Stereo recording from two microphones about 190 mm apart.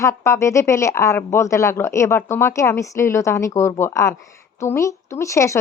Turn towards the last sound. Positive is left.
turn(degrees=15)  # may be behind; listen again after turning